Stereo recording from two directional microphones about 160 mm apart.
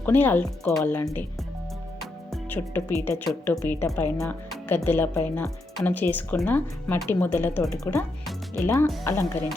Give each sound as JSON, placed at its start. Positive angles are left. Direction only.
{"t": 0.0, "sound": "speech", "side_deg": 10}
{"t": 2.0, "sound": "music", "side_deg": 0}
{"t": 3.4, "sound": "speech", "side_deg": 15}